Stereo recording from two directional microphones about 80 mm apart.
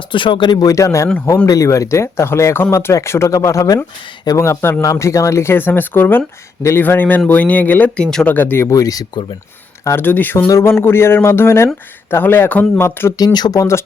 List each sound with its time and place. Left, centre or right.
0.1 s speech: left
0.6 s speech: left
6.6 s speech: left
6.8 s speech: left
8.7 s speech: left
9.8 s speech: left
10.3 s speech: left
13.1 s speech: left